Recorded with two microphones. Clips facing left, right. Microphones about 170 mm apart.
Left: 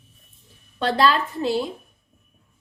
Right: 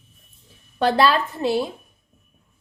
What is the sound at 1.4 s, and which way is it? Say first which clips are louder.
Speech: right 1 dB; 70° right (ahead or behind).